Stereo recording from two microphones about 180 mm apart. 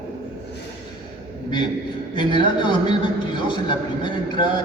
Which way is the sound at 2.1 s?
25° left (ahead or behind).